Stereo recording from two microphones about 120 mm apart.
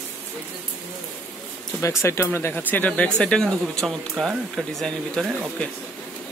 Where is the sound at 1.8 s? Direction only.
20° left (ahead or behind); by 5.4 s centre (ahead or behind).